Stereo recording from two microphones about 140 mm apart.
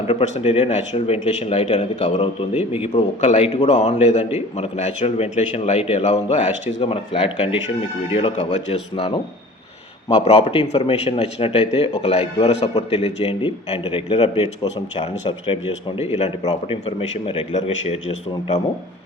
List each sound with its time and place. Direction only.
0.1 s a man's voice: 45° left (ahead or behind)
2.2 s a man's voice: 45° left (ahead or behind)
6.9 s a man's voice: 40° left (ahead or behind)
9.0 s speech: 35° left (ahead or behind)
10.2 s a man's voice: 45° left (ahead or behind)